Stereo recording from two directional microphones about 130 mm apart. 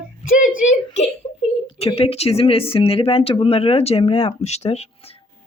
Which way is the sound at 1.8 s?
50° left (ahead or behind).